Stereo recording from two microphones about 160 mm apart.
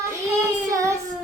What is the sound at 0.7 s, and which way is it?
Child singing, 20° right (ahead or behind).